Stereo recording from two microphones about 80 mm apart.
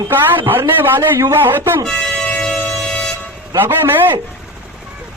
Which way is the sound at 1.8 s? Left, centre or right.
Centre.